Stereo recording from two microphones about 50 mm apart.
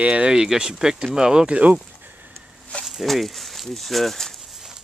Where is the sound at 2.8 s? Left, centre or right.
Centre.